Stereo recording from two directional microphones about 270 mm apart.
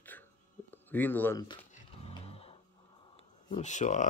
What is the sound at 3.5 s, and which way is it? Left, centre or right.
Speech, left.